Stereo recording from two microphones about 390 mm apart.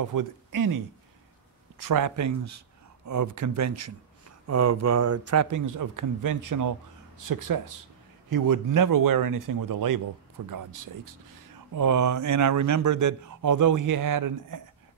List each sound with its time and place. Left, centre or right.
0.0 s speech: right
1.8 s a man's voice: right